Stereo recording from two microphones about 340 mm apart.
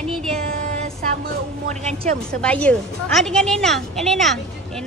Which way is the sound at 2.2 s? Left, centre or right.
Centre.